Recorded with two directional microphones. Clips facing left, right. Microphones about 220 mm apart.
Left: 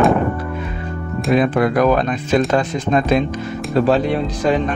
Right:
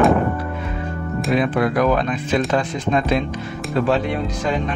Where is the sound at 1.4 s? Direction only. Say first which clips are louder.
Left 3 dB; 45° left (ahead or behind).